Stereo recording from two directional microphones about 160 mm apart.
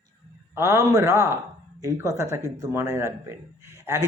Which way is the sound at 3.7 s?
15° right (ahead or behind).